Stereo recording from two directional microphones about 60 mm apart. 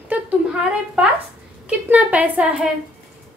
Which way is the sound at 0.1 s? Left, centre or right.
Right.